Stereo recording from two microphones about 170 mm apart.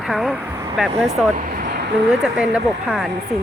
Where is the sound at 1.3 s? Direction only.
55° right (ahead or behind); by 1.9 s 70° right (ahead or behind).